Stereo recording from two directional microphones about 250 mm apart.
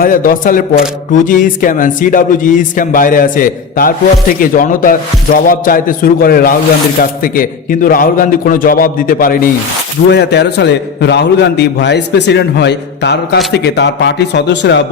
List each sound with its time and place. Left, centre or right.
0.0 s a man's voice: left